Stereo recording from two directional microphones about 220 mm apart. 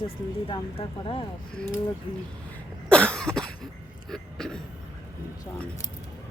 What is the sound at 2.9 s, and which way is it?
Cough, 5° left (ahead or behind).